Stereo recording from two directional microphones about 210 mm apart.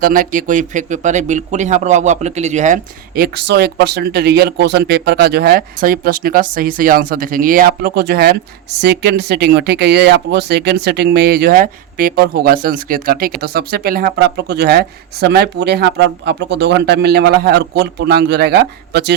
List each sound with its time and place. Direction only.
0.0 s speech: 40° right (ahead or behind)